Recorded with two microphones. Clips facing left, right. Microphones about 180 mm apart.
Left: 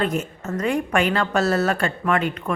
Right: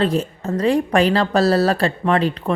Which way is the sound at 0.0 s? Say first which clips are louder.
Right 4 dB; 30° right (ahead or behind).